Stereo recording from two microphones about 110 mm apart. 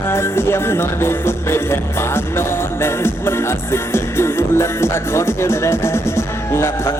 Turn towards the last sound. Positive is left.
turn(degrees=25)  # may be behind; listen again after turning